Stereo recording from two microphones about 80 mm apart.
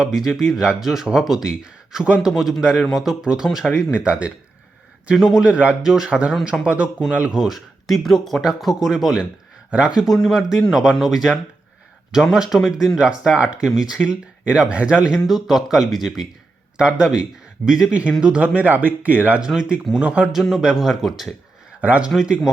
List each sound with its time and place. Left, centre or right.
0.0 s speech: centre
10.2 s speech: centre
21.8 s speech: centre
22.1 s speech: centre